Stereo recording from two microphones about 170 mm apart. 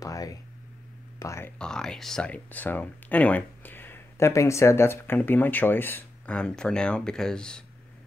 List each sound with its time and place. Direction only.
0.0 s a sound: 20° left (ahead or behind)
1.2 s speech: 15° left (ahead or behind)
1.6 s speech: 5° left (ahead or behind)